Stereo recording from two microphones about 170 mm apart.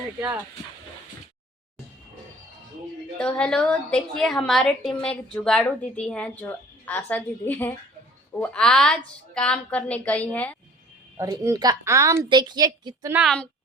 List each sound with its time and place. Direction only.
3.2 s a woman's voice: 5° left (ahead or behind)
11.2 s a woman's voice: 20° right (ahead or behind)
13.1 s a woman's voice: centre (ahead or behind)